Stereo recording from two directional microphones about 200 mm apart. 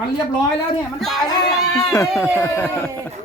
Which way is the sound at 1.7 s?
15° left (ahead or behind).